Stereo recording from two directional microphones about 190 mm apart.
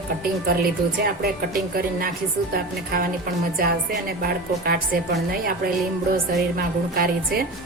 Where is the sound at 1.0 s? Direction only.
50° right (ahead or behind).